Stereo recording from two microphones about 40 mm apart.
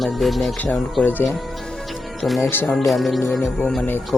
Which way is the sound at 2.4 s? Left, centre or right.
Left.